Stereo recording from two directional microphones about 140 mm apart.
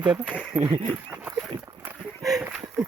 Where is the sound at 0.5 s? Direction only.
55° right (ahead or behind).